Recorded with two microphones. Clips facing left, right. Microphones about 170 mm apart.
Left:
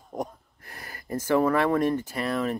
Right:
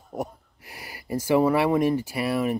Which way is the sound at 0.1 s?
10° right (ahead or behind).